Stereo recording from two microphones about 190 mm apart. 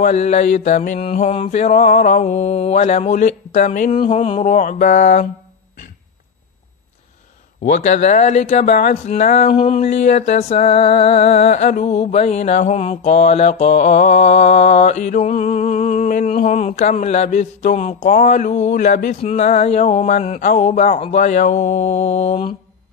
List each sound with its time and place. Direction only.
0.0 s speech: 40° left (ahead or behind)
7.6 s speech: 45° left (ahead or behind)